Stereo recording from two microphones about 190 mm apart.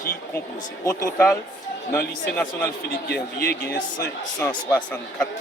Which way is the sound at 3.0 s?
60° left (ahead or behind).